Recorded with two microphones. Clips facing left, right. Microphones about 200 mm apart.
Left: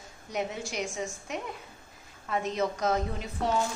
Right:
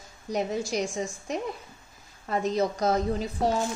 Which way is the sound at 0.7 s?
35° right (ahead or behind).